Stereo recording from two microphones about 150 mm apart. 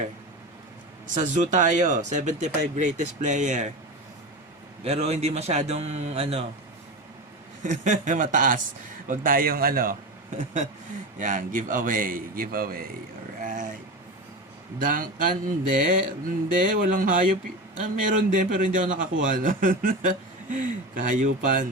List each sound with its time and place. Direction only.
1.1 s a man's voice: 55° right (ahead or behind)
4.8 s a man's voice: 45° right (ahead or behind)
7.6 s a man's voice: 55° right (ahead or behind); by 12.9 s 80° right
13.4 s a sound: 60° right (ahead or behind)
14.8 s a man's voice: 65° right (ahead or behind)